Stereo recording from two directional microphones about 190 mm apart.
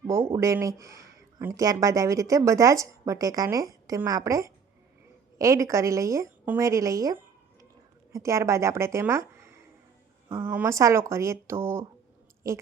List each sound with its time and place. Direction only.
0.1 s speech: 15° right (ahead or behind)